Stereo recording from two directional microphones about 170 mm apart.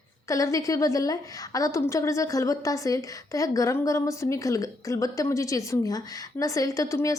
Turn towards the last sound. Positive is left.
turn(degrees=20)  # may be behind; listen again after turning